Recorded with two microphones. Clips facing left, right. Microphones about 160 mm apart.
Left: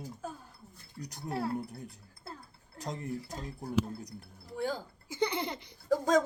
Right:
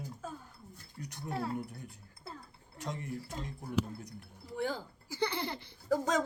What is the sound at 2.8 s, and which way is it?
Speech, 35° left (ahead or behind).